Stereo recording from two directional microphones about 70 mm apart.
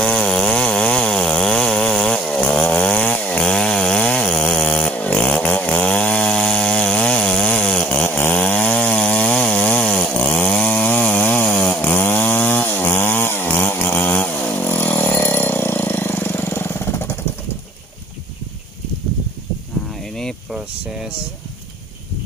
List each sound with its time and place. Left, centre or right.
0.0 s chainsaw: centre
8.1 s chainsaw: left
20.5 s a sound: centre